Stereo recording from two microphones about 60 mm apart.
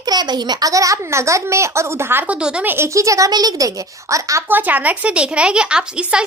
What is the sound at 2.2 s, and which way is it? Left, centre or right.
Speech, centre.